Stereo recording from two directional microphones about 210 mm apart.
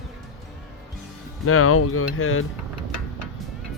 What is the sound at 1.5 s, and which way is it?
Speech, 90° left.